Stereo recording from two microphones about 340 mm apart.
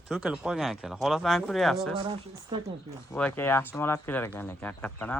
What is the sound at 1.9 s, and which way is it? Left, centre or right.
Speech, centre.